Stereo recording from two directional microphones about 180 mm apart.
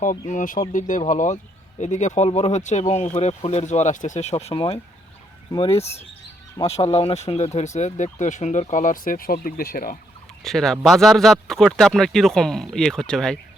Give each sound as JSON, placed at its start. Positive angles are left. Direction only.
{"t": 0.3, "sound": "speech", "side_deg": 45}
{"t": 10.4, "sound": "speech", "side_deg": 0}